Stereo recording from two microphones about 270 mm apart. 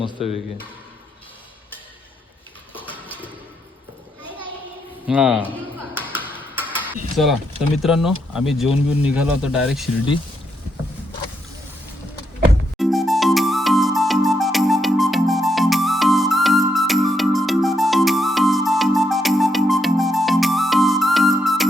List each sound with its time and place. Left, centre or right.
0.0 s speech: left
2.8 s a sound: centre
5.0 s speech: centre
6.1 s music: centre
6.9 s speech: centre
12.7 s music: centre